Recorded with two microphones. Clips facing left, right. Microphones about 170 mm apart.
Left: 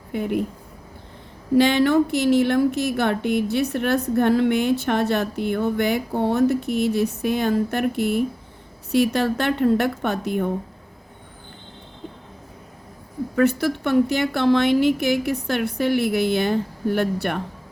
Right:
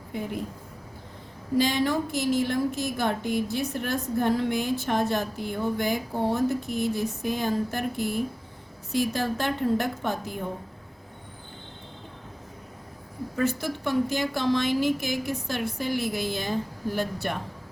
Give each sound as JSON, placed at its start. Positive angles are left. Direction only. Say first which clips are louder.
{"t": 0.1, "sound": "a woman's voice", "louder": "left 8 dB", "side_deg": 65}
{"t": 1.5, "sound": "a woman's voice", "louder": "left 7 dB", "side_deg": 70}
{"t": 13.3, "sound": "a woman's voice", "louder": "left 7 dB", "side_deg": 65}